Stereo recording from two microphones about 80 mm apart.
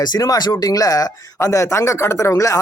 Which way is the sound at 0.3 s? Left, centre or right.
Left.